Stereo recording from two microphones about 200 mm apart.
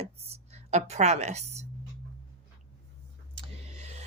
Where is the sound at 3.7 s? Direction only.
35° right (ahead or behind).